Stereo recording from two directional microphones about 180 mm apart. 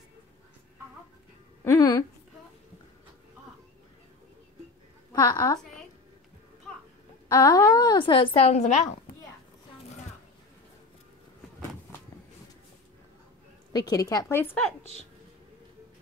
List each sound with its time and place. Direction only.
1.6 s speech: 15° left (ahead or behind)
5.1 s a woman's voice: 20° left (ahead or behind)
7.2 s a woman's voice: 20° left (ahead or behind); by 8.8 s 40° left (ahead or behind)
13.7 s a woman's voice: 20° left (ahead or behind)